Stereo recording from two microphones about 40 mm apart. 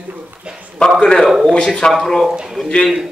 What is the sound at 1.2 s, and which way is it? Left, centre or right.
Speech, centre.